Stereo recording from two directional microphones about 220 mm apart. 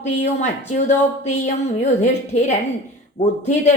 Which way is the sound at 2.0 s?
30° left (ahead or behind).